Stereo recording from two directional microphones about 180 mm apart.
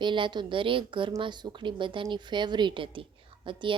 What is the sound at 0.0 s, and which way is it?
A woman's voice, 25° right (ahead or behind).